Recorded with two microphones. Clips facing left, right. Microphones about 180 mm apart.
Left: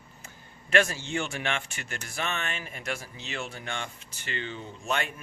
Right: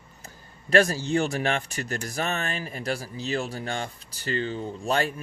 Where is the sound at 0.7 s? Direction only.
35° right (ahead or behind).